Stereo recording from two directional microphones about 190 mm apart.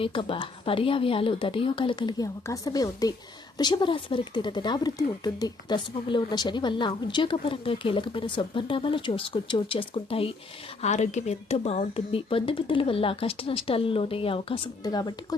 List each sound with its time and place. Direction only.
0.0 s speech: 30° left (ahead or behind)